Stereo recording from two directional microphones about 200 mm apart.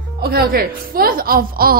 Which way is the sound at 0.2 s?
50° right (ahead or behind).